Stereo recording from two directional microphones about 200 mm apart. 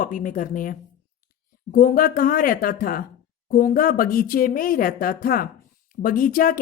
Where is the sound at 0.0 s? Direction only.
40° left (ahead or behind).